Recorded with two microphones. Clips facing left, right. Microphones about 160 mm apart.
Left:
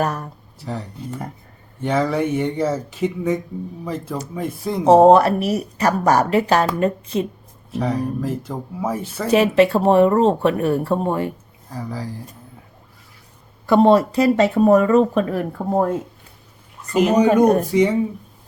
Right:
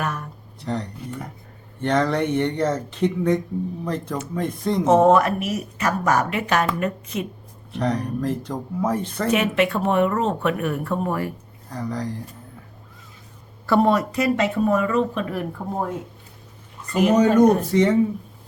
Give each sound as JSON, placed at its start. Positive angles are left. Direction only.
{"t": 0.0, "sound": "speech", "side_deg": 35}
{"t": 0.6, "sound": "speech", "side_deg": 5}
{"t": 4.9, "sound": "speech", "side_deg": 35}
{"t": 7.7, "sound": "speech", "side_deg": 5}
{"t": 9.3, "sound": "speech", "side_deg": 35}
{"t": 11.7, "sound": "speech", "side_deg": 5}
{"t": 13.7, "sound": "speech", "side_deg": 25}
{"t": 16.9, "sound": "speech", "side_deg": 10}